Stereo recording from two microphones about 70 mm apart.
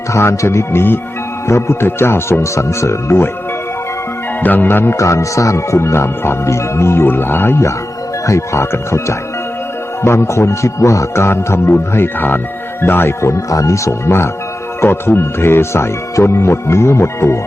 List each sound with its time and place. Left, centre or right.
0.1 s speech: left
4.4 s speech: left
4.9 s speech: left